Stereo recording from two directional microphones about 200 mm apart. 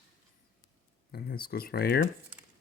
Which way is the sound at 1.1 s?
50° left (ahead or behind).